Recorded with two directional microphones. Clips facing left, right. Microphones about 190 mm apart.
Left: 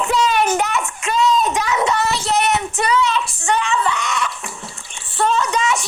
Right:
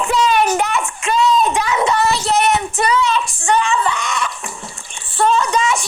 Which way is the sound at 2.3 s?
50° right (ahead or behind).